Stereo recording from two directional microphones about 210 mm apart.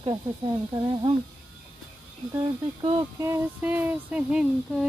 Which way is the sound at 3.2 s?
10° right (ahead or behind).